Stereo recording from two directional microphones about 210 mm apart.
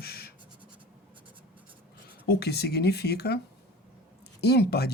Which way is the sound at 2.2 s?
50° left (ahead or behind).